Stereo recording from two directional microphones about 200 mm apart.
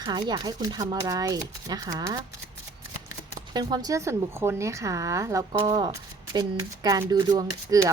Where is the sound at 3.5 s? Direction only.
20° right (ahead or behind).